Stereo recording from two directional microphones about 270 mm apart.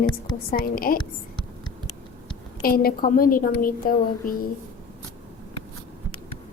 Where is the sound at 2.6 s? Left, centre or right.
Left.